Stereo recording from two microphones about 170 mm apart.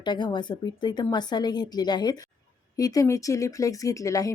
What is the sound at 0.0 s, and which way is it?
Speech, 25° left (ahead or behind).